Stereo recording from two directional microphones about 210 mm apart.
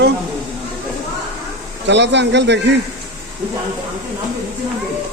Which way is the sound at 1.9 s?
55° right (ahead or behind).